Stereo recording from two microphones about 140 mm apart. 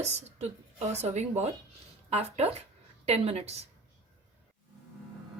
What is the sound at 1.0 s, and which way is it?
Speech, 55° right (ahead or behind).